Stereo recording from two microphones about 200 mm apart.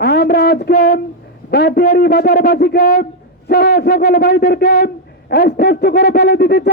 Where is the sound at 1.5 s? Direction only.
55° left (ahead or behind).